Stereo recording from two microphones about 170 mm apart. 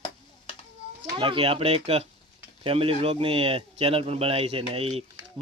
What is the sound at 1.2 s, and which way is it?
Speech, 30° right (ahead or behind).